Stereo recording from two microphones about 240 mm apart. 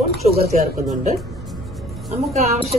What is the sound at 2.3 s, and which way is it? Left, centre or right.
Speech, right.